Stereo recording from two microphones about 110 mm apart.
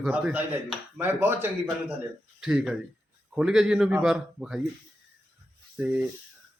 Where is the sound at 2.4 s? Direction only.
5° right (ahead or behind).